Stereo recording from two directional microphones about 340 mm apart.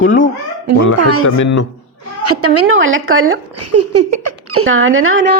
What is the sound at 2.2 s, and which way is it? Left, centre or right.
A woman's voice, right.